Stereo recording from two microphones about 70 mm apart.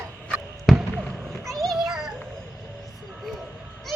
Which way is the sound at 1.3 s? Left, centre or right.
Centre.